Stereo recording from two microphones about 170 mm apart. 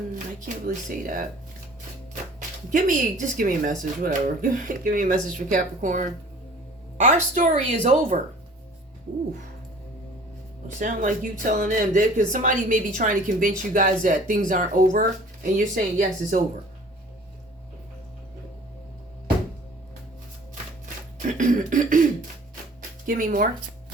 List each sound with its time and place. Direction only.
0.4 s a woman's voice: 55° right (ahead or behind)
2.6 s a woman's voice: 50° right (ahead or behind)
10.8 s a woman's voice: 50° right (ahead or behind)
21.2 s a woman's voice: 50° right (ahead or behind)
23.0 s a woman's voice: 55° right (ahead or behind)